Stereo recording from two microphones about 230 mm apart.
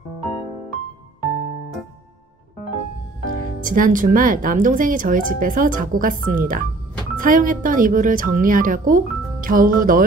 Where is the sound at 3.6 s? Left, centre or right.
Right.